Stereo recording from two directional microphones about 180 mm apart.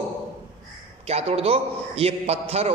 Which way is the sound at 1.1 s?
35° right (ahead or behind).